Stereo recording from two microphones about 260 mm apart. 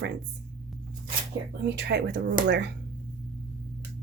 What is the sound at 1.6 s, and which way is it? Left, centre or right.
A woman's voice, right.